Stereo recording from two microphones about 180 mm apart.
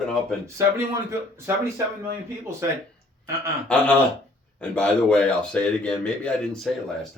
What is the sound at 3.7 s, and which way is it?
Speech, 5° left (ahead or behind).